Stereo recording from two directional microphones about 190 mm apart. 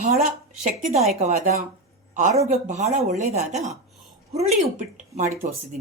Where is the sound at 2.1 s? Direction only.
35° right (ahead or behind).